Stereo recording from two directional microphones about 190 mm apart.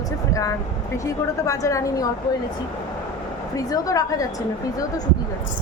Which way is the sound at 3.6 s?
20° left (ahead or behind).